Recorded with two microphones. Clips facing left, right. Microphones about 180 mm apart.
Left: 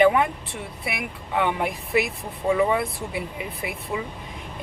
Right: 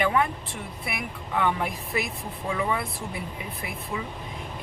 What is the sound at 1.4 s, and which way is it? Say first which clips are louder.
Speech: left 2 dB; 5° left (ahead or behind).